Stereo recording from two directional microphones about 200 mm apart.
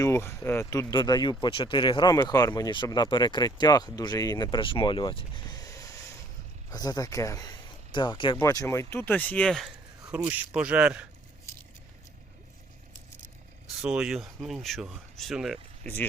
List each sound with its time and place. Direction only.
0.0 s speech: 15° left (ahead or behind); by 11.0 s 5° right (ahead or behind)
13.8 s speech: 5° right (ahead or behind)